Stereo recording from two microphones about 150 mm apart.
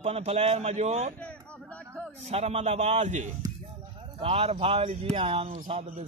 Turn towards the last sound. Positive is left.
turn(degrees=-40)  # may be behind; listen again after turning